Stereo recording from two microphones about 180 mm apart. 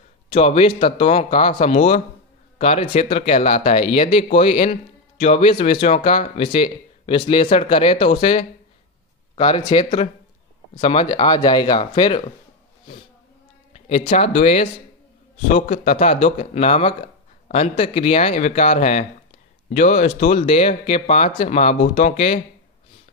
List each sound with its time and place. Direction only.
0.3 s speech: 35° left (ahead or behind)
13.7 s a sound: 40° left (ahead or behind)
14.1 s speech: 35° left (ahead or behind)